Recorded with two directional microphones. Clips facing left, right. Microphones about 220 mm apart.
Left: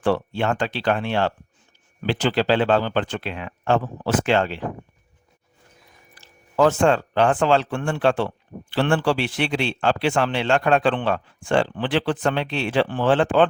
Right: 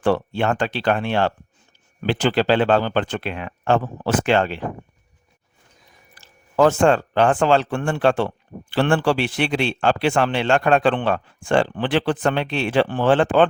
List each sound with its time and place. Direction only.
0.0 s a man's voice: 55° right (ahead or behind)
6.1 s a man's voice: 45° right (ahead or behind)